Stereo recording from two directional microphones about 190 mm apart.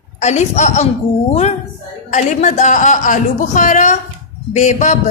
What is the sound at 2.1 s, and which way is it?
A woman's voice, 40° left (ahead or behind).